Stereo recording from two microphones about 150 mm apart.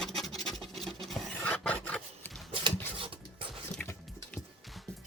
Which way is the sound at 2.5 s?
35° right (ahead or behind).